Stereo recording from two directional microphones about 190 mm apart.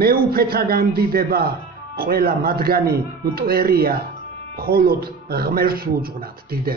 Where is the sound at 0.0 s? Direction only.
55° right (ahead or behind).